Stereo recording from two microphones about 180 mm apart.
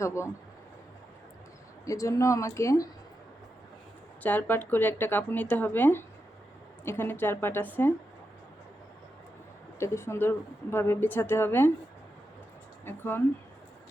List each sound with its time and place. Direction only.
0.0 s speech: 15° left (ahead or behind)
1.8 s speech: 15° left (ahead or behind)
4.2 s speech: 10° left (ahead or behind)
9.7 s speech: 15° left (ahead or behind)
12.8 s speech: 10° left (ahead or behind)